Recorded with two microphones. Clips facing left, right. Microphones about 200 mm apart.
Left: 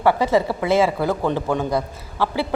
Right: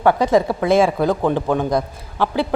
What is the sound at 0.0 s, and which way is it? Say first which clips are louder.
A woman's voice: right 2 dB; 15° right (ahead or behind).